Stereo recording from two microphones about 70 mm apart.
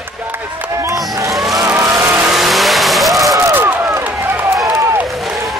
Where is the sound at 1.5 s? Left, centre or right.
Right.